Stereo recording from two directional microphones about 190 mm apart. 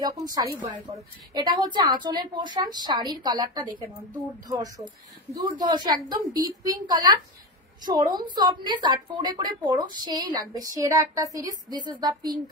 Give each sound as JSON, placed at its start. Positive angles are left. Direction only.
{"t": 0.0, "sound": "a woman's voice", "side_deg": -20}